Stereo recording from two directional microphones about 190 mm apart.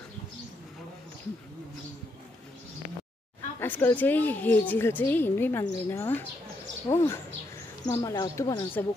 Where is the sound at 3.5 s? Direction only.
10° left (ahead or behind).